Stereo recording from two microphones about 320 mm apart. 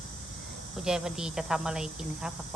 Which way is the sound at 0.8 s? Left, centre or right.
Centre.